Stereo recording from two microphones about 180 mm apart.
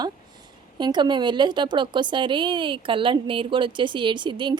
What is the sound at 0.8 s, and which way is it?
Speech, 25° right (ahead or behind).